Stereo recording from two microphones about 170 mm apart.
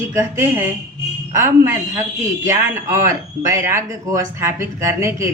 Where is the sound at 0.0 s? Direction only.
15° right (ahead or behind).